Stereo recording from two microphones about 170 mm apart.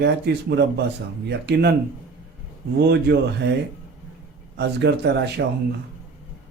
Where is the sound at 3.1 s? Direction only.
65° right (ahead or behind).